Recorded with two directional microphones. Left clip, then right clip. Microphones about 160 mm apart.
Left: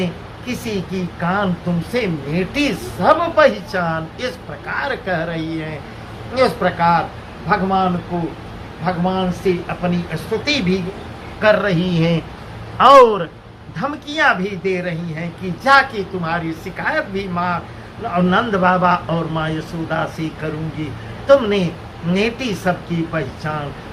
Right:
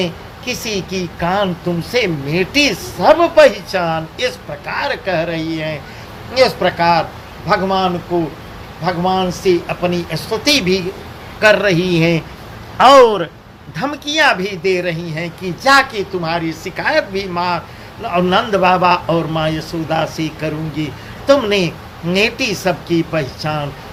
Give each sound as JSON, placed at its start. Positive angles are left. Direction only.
{"t": 0.0, "sound": "speech", "side_deg": -45}